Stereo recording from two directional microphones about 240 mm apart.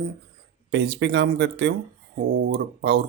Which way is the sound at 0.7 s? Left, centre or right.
Right.